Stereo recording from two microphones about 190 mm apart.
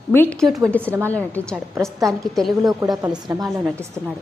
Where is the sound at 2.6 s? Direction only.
15° right (ahead or behind).